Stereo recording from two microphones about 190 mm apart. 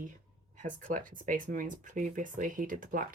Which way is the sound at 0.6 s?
45° right (ahead or behind).